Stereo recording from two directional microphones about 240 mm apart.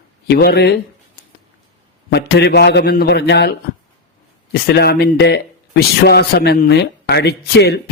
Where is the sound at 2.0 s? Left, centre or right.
Left.